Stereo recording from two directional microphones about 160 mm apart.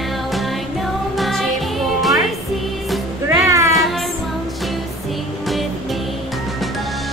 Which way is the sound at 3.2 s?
20° right (ahead or behind).